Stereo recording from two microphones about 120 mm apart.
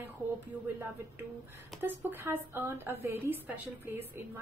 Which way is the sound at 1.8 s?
20° right (ahead or behind).